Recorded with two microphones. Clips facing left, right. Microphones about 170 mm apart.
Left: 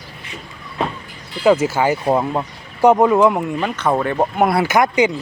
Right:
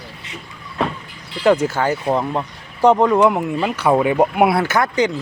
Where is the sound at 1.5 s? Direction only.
5° left (ahead or behind); by 4.5 s 10° right (ahead or behind).